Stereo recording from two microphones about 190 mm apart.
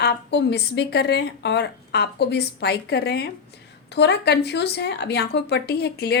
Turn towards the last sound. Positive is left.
turn(degrees=55)  # may be behind; listen again after turning